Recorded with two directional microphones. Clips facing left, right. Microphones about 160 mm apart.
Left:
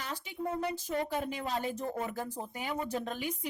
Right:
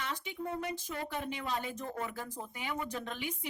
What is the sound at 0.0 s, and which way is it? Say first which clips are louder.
Speech: left 1 dB; 35° left (ahead or behind).